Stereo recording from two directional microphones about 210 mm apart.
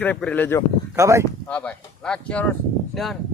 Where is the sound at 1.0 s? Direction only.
15° right (ahead or behind).